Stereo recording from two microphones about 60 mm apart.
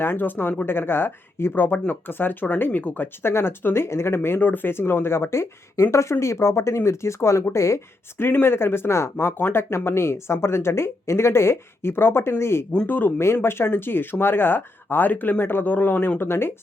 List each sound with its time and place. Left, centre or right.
0.0 s speech: left
3.2 s speech: left
4.4 s speech: left
8.2 s speech: left
12.9 s speech: left
13.1 s speech: left